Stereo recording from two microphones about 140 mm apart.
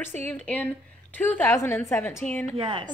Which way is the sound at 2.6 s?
40° right (ahead or behind).